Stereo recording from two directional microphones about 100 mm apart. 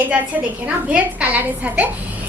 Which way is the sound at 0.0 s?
15° right (ahead or behind).